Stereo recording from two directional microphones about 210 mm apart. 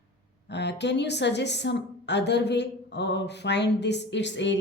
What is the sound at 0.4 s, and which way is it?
A woman's voice, 55° left (ahead or behind).